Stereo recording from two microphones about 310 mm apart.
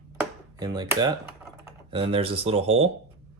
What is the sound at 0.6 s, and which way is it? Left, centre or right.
Speech, centre.